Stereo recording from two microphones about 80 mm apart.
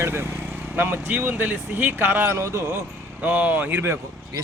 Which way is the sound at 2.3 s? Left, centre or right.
Right.